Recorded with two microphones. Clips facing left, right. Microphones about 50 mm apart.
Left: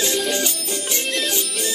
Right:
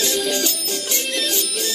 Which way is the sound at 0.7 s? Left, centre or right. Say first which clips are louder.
Even; left.